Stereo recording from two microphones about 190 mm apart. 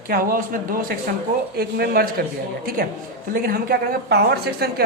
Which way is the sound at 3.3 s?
50° right (ahead or behind).